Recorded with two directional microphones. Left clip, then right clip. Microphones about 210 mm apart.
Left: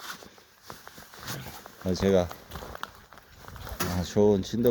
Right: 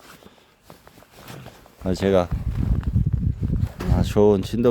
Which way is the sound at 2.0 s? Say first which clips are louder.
Right 5 dB; 20° right (ahead or behind).